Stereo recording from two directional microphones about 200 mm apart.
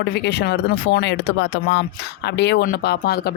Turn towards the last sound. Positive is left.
turn(degrees=50)  # may be behind; listen again after turning